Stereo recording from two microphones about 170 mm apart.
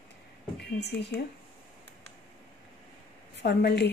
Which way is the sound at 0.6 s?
85° left.